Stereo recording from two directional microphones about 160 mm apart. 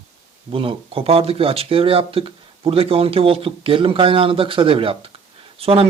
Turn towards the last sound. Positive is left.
turn(degrees=-35)  # may be behind; listen again after turning